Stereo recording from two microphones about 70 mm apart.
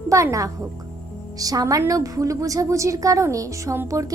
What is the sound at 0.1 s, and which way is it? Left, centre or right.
A woman's voice, right.